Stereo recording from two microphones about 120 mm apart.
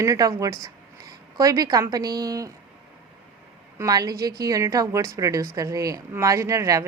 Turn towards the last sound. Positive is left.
turn(degrees=-25)  # may be behind; listen again after turning